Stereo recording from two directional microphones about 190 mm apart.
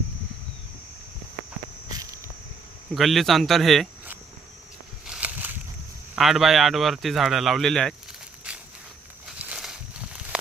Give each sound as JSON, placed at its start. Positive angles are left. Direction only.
{"t": 1.9, "sound": "insect", "side_deg": -20}
{"t": 2.9, "sound": "a man's voice", "side_deg": 0}
{"t": 5.0, "sound": "a sound", "side_deg": -5}
{"t": 6.1, "sound": "a man's voice", "side_deg": 0}
{"t": 8.5, "sound": "walk", "side_deg": -5}